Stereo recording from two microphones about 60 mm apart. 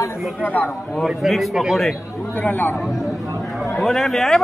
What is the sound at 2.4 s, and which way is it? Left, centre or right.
Speech, left.